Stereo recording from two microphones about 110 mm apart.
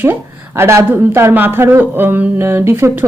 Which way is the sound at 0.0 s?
20° right (ahead or behind).